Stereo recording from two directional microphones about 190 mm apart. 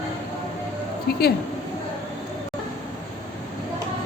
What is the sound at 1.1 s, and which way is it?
Speech, 55° left (ahead or behind).